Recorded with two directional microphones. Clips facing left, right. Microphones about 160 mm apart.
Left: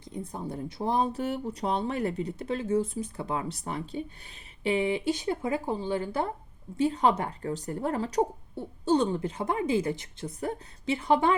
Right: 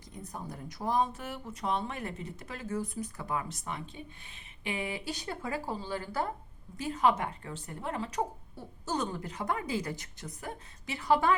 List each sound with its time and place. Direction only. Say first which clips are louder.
0.0 s a woman's voice: left 6 dB; 30° left (ahead or behind)